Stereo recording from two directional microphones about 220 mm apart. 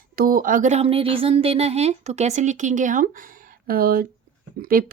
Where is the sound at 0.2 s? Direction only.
40° right (ahead or behind).